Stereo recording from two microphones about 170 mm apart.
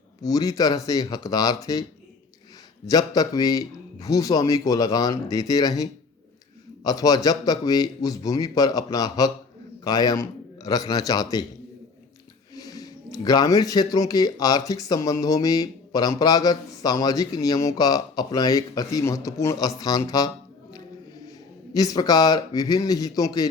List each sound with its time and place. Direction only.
0.2 s speech: 20° left (ahead or behind)
2.8 s a man's voice: 20° left (ahead or behind)
12.5 s speech: 20° left (ahead or behind)
21.7 s speech: 20° left (ahead or behind)